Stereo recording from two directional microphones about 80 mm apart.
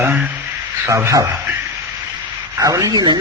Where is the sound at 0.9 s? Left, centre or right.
Right.